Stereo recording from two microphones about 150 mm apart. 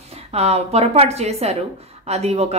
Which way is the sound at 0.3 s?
45° right (ahead or behind).